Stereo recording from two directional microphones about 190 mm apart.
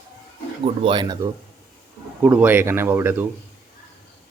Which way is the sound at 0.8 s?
25° right (ahead or behind).